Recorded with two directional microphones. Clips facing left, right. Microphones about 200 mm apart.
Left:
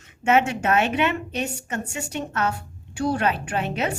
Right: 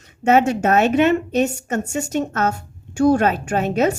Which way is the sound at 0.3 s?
40° right (ahead or behind).